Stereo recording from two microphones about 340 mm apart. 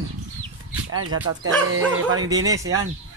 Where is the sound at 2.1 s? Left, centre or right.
Centre.